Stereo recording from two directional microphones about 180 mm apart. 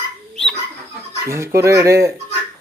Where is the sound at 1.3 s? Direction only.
15° right (ahead or behind).